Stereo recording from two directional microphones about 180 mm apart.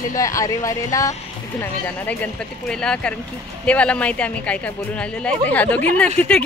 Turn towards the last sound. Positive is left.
turn(degrees=10)  # may be behind; listen again after turning